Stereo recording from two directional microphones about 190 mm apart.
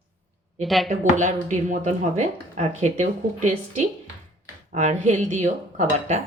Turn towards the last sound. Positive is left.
turn(degrees=-40)  # may be behind; listen again after turning